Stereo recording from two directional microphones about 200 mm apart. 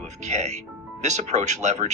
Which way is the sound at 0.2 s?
35° right (ahead or behind).